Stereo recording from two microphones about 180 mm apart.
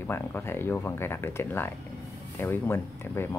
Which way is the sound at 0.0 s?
15° left (ahead or behind).